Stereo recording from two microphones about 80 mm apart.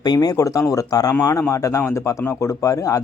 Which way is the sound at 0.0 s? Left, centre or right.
Left.